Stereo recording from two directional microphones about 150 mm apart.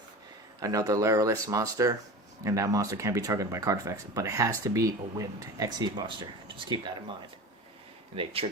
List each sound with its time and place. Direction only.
0.6 s speech: 25° right (ahead or behind)
8.1 s speech: 35° right (ahead or behind)